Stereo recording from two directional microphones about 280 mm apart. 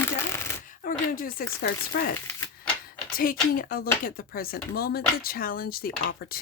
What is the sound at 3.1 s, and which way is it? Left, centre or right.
Speech, left.